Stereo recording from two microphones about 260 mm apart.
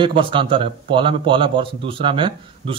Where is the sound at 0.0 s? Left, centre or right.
Centre.